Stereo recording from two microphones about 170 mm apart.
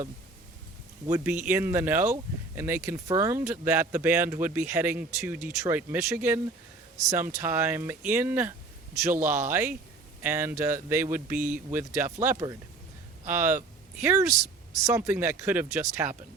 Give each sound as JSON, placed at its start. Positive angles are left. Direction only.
{"t": 1.0, "sound": "speech", "side_deg": -10}
{"t": 11.3, "sound": "speech", "side_deg": -55}
{"t": 11.7, "sound": "speech", "side_deg": -15}